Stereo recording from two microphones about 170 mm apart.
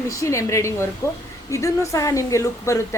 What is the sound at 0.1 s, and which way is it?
A woman's voice, 20° left (ahead or behind).